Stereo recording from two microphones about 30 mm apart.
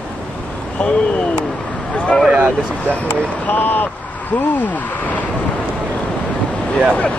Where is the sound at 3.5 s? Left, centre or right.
Left.